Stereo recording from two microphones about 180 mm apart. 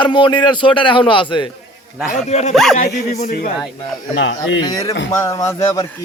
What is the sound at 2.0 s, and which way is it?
Speech, 40° left (ahead or behind).